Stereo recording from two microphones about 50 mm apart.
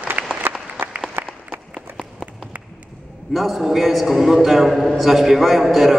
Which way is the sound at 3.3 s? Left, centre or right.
Centre.